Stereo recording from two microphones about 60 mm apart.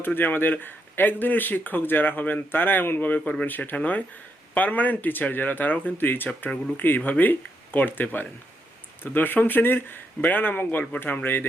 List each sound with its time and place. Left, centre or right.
0.0 s speech: left